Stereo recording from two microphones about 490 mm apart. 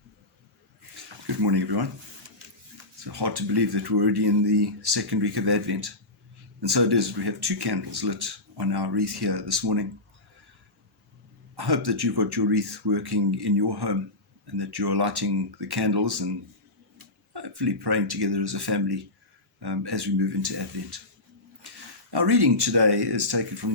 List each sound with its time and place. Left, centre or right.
1.4 s speech: right
3.0 s speech: right
11.5 s speech: right
17.3 s speech: right
21.6 s a sound: right
22.1 s speech: right